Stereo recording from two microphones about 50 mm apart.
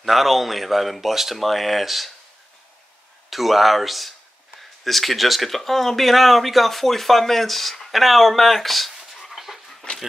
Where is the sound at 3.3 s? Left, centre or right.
Centre.